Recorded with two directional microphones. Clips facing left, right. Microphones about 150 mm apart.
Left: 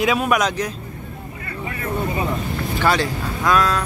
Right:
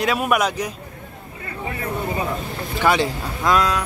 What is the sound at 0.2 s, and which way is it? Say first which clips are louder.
Speech: left 1 dB; 5° right (ahead or behind).